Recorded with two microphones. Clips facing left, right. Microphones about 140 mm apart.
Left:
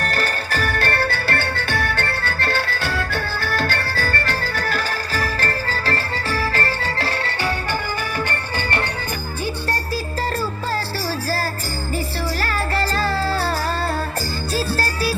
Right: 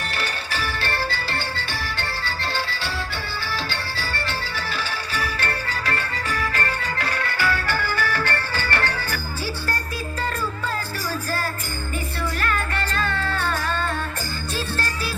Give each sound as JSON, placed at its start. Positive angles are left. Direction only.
{"t": 0.0, "sound": "music", "side_deg": 45}
{"t": 12.4, "sound": "music", "side_deg": 35}